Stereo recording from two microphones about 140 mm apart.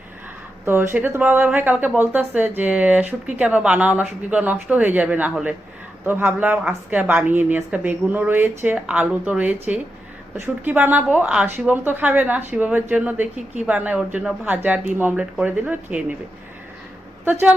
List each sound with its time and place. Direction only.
0.6 s a woman's voice: 15° right (ahead or behind)